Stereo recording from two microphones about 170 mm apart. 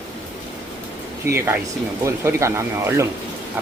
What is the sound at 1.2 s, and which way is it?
Speech, 15° right (ahead or behind).